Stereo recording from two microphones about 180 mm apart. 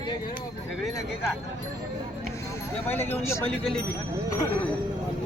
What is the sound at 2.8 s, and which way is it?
Speech, 10° left (ahead or behind).